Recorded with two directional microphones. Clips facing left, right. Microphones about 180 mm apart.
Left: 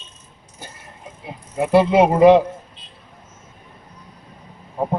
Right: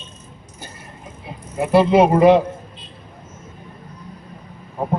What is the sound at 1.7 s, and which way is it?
Speech, 20° left (ahead or behind).